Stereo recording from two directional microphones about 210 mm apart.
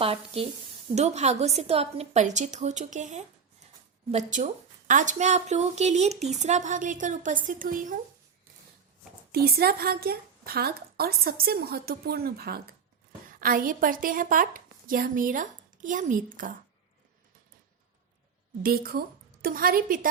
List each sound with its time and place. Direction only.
0.0 s speech: 25° right (ahead or behind)
9.3 s a woman's voice: 45° right (ahead or behind)
18.6 s a woman's voice: 45° right (ahead or behind)